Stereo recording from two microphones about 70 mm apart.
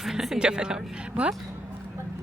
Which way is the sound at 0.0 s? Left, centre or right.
Centre.